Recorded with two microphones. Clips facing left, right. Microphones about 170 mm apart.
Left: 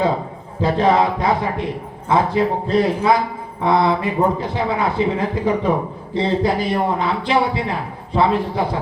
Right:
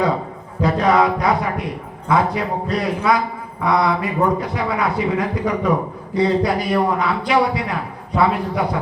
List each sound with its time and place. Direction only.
0.6 s mantra: 30° left (ahead or behind)
2.0 s a man's voice: 30° left (ahead or behind)